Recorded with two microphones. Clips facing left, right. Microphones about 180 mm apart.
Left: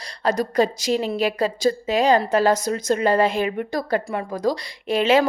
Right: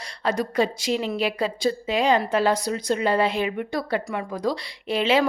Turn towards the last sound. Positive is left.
turn(degrees=45)  # may be behind; listen again after turning